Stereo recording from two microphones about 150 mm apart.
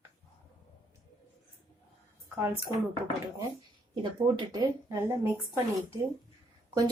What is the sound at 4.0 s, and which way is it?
Speech, 30° right (ahead or behind).